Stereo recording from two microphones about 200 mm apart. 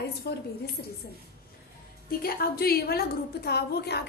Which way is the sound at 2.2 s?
50° left (ahead or behind).